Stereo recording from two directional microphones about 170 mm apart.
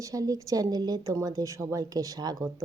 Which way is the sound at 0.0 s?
20° right (ahead or behind).